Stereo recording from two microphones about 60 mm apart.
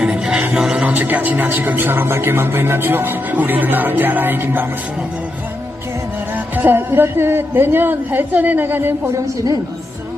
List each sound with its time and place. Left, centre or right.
0.0 s music: centre
0.9 s speech: right
6.3 s speech: right